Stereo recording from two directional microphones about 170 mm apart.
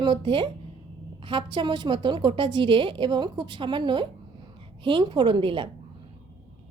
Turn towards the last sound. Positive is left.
turn(degrees=-30)  # may be behind; listen again after turning